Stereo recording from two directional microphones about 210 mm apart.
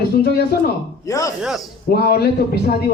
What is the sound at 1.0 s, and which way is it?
Speech, 15° left (ahead or behind).